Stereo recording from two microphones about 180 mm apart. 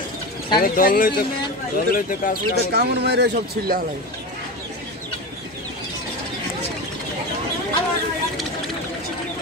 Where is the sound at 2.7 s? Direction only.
65° right (ahead or behind).